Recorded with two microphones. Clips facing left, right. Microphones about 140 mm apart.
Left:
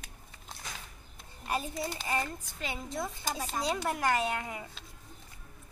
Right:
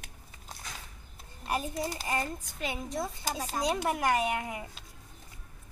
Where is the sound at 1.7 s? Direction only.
40° right (ahead or behind).